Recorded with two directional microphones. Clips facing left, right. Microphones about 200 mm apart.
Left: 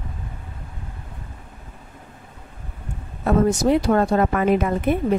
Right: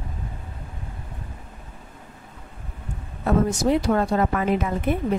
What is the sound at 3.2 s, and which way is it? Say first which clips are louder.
A woman's voice: left 3 dB; 55° left (ahead or behind).